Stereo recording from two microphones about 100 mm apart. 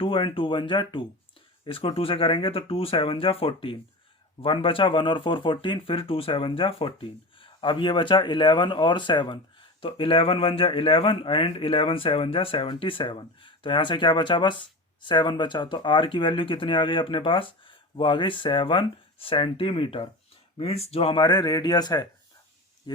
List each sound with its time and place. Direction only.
0.0 s a man's voice: 65° left (ahead or behind)
1.6 s a man's voice: 65° left (ahead or behind)
20.6 s speech: 80° left
21.2 s speech: 45° left (ahead or behind)